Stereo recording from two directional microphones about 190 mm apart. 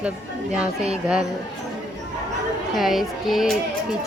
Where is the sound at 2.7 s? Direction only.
Centre (ahead or behind).